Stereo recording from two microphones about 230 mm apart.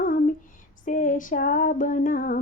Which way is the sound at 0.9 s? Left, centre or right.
Left.